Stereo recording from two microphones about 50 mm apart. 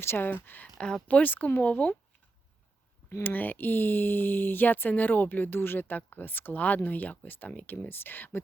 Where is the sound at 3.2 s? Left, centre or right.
Left.